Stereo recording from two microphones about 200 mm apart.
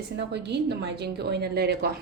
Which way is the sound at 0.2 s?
60° right (ahead or behind).